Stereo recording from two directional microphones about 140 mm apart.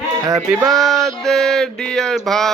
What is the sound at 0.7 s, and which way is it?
Music, centre (ahead or behind).